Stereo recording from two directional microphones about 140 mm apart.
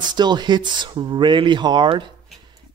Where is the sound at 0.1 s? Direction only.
30° right (ahead or behind).